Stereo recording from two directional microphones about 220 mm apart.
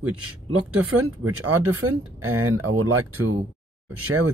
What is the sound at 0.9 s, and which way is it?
Speech, 75° right (ahead or behind).